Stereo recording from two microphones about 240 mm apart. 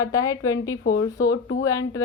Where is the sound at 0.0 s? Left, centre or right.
Centre.